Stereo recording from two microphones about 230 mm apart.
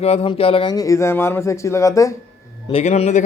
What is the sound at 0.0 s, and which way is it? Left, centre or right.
Speech, left.